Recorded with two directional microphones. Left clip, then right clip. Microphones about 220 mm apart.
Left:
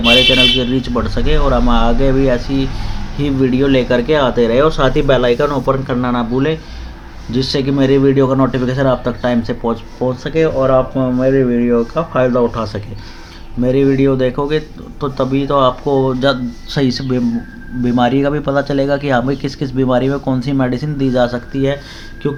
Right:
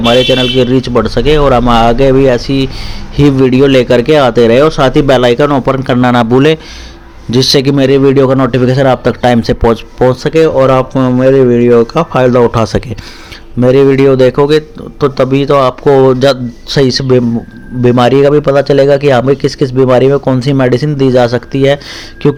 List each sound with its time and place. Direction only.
0.0 s a man's voice: 40° right (ahead or behind)